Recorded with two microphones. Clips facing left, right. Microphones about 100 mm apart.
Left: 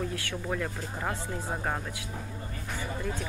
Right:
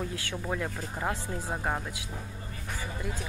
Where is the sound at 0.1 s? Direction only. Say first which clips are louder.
Left 1 dB; 25° right (ahead or behind).